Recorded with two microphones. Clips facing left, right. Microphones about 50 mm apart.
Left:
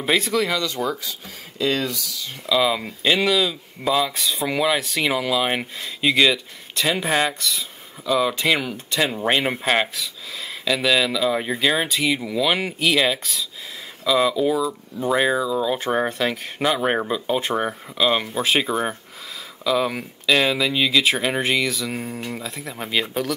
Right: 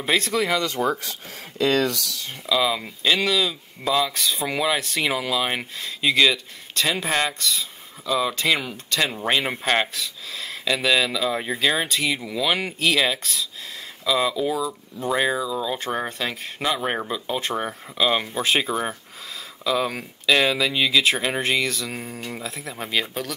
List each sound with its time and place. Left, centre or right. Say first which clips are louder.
0.0 s speech: left 2 dB; centre
0.6 s speech: right 1 dB; right
1.6 s speech: right 2 dB; right
2.4 s speech: left 2 dB; centre
16.1 s speech: left 5 dB; left
16.5 s speech: left 3 dB; centre
17.9 s speech: left 1 dB; centre